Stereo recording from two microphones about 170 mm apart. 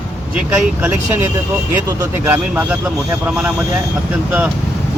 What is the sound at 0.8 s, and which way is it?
Speech, 10° right (ahead or behind).